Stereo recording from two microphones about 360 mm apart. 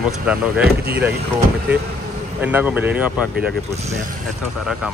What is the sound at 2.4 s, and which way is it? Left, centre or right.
Speech, centre.